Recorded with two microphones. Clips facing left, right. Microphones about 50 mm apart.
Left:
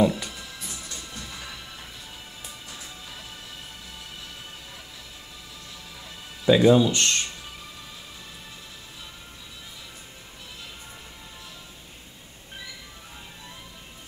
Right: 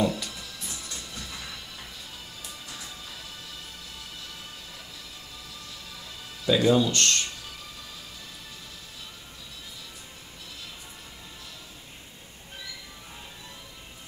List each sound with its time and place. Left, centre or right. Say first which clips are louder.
0.0 s a sound: left 4 dB; left
0.9 s music: left 1 dB; centre
6.4 s speech: left 4 dB; left